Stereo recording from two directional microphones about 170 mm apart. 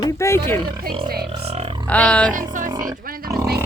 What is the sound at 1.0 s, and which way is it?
Speech, 65° right (ahead or behind).